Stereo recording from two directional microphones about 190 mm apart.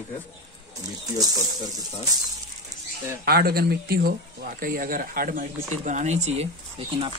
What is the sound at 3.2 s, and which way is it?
Speech, 55° right (ahead or behind).